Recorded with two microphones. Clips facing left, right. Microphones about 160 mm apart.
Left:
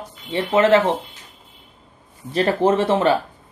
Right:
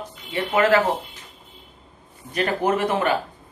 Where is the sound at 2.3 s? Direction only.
30° left (ahead or behind).